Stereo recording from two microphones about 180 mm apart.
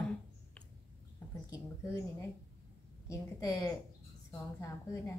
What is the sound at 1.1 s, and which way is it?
A woman's voice, 15° left (ahead or behind).